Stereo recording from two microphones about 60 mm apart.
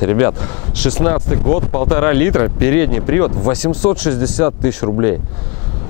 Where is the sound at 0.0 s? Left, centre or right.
Centre.